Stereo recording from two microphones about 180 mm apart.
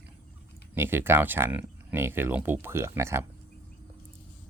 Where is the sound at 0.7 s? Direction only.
10° right (ahead or behind).